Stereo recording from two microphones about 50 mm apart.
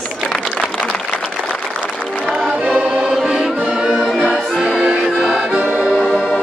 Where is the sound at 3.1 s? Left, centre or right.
Centre.